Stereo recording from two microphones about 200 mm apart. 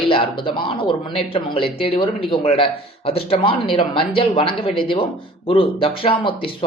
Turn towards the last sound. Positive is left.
turn(degrees=25)  # may be behind; listen again after turning